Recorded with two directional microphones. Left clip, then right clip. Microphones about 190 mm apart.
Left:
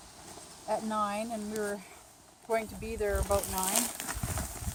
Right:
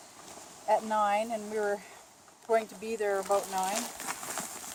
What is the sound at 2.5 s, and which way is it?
Speech, 30° right (ahead or behind).